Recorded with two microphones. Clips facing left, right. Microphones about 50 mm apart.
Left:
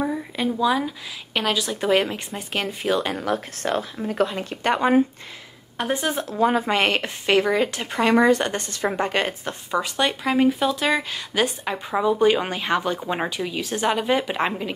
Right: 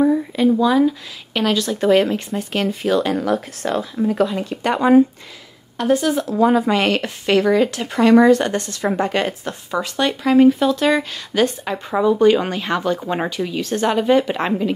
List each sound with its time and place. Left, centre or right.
0.0 s a sound: centre
1.3 s speech: centre
3.3 s speech: left
5.8 s speech: left
6.4 s speech: left; by 14.7 s centre